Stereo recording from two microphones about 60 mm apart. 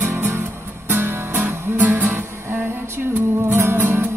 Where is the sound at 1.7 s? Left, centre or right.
Right.